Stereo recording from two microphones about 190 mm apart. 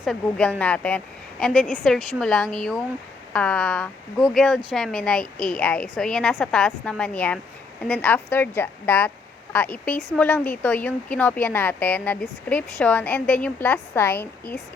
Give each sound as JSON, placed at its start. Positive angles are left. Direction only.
{"t": 0.0, "sound": "speech", "side_deg": 0}